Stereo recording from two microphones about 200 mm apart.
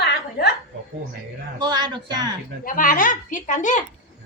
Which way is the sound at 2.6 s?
40° left (ahead or behind).